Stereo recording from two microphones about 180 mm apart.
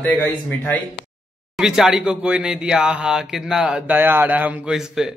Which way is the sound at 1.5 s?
Centre (ahead or behind).